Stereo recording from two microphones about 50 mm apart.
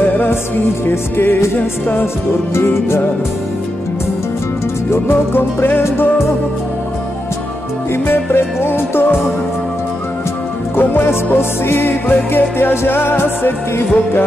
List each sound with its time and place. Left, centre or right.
0.8 s music: left
2.5 s music: left
4.9 s music: left
7.9 s music: left
10.8 s music: left